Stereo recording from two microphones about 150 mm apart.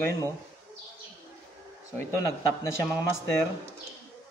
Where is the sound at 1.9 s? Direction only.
20° left (ahead or behind).